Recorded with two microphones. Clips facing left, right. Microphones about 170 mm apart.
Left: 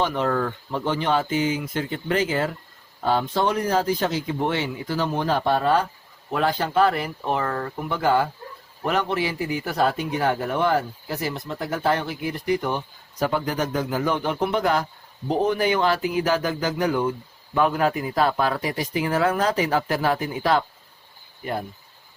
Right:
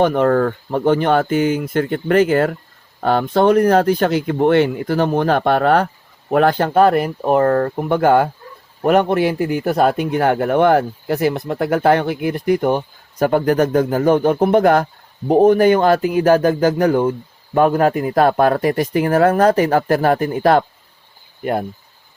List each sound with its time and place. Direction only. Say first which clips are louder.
0.0 s a man's voice: right 9 dB; 55° right (ahead or behind)